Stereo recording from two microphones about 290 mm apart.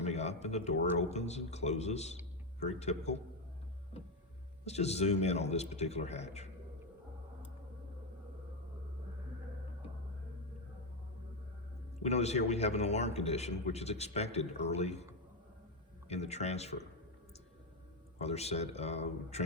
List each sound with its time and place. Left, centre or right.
0.0 s a man's voice: left
4.6 s a man's voice: left
12.0 s a man's voice: left
16.0 s a man's voice: left
18.2 s a man's voice: left